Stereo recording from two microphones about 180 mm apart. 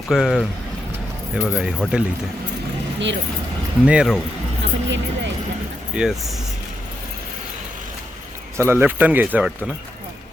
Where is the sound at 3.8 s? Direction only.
5° right (ahead or behind).